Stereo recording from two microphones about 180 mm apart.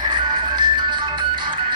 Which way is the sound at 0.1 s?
25° right (ahead or behind).